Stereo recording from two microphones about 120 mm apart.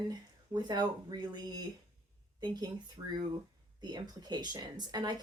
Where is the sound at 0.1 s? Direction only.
35° right (ahead or behind).